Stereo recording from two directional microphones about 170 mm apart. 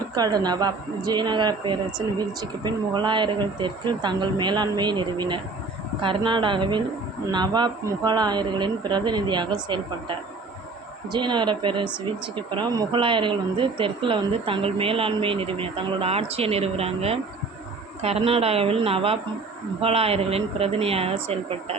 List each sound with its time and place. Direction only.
0.1 s speech: 25° right (ahead or behind)